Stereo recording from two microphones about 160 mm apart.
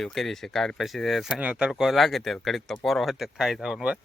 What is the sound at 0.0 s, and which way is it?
Speech, centre (ahead or behind).